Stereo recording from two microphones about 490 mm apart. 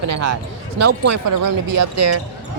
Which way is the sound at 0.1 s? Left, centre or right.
Right.